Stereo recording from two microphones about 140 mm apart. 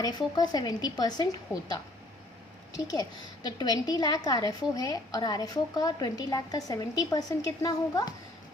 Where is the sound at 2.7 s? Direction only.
30° left (ahead or behind).